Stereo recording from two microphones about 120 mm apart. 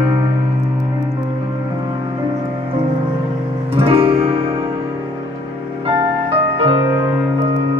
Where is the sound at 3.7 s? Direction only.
50° right (ahead or behind).